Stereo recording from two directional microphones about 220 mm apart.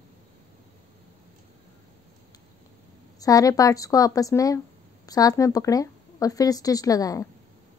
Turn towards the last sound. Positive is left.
turn(degrees=15)  # may be behind; listen again after turning